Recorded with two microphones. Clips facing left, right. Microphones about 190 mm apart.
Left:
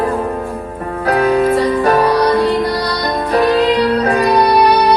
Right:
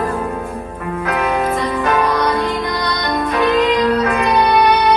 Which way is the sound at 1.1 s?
35° left (ahead or behind).